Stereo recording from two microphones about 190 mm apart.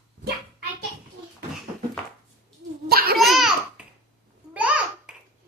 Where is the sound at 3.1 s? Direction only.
Centre (ahead or behind).